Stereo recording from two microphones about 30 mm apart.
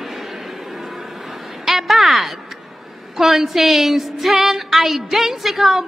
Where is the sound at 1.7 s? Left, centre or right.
Centre.